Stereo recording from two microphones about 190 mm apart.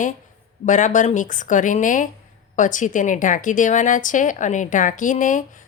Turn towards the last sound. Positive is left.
turn(degrees=45)  # may be behind; listen again after turning